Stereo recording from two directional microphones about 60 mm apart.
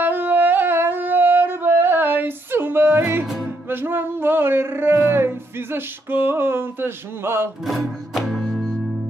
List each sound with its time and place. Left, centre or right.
0.0 s singing: right
3.6 s music: right
7.6 s music: centre